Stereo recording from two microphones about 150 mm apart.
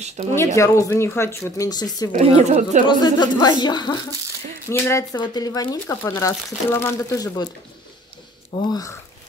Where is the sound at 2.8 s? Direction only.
30° left (ahead or behind).